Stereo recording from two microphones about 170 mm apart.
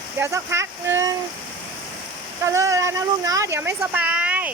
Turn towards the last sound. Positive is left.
turn(degrees=-10)  # may be behind; listen again after turning